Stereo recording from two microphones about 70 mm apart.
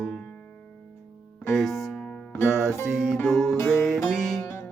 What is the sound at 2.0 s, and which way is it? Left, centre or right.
Music, centre.